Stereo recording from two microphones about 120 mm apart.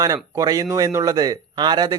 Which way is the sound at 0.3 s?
30° right (ahead or behind).